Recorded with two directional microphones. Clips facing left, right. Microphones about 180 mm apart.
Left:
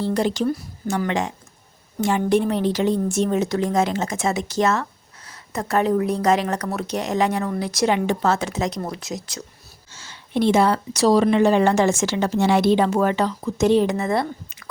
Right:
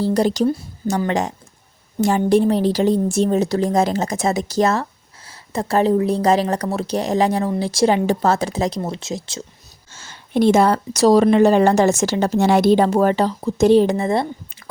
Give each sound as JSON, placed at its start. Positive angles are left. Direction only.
{"t": 0.0, "sound": "a woman's voice", "side_deg": -40}
{"t": 9.9, "sound": "a woman's voice", "side_deg": -50}